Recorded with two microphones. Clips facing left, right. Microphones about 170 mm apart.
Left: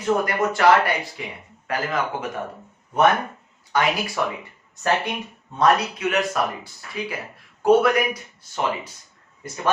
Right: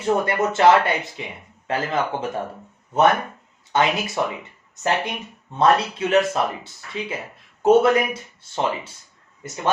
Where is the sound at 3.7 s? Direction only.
20° right (ahead or behind).